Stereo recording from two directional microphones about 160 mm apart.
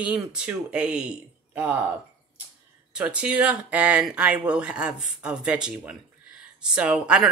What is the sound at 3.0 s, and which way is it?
Speech, 5° right (ahead or behind).